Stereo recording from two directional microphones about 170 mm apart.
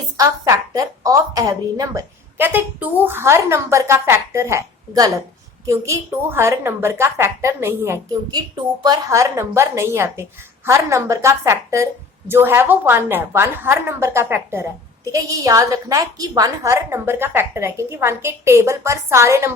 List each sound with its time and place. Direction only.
0.2 s a woman's voice: 20° right (ahead or behind)